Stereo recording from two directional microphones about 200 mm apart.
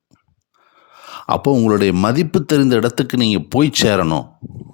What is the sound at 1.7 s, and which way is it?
Speech, 45° left (ahead or behind).